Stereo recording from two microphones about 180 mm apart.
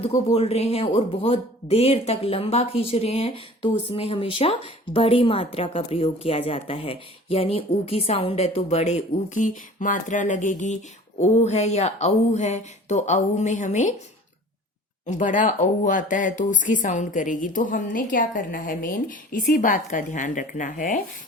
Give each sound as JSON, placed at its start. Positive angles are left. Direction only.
{"t": 0.3, "sound": "a woman's voice", "side_deg": 35}
{"t": 15.0, "sound": "speech", "side_deg": 45}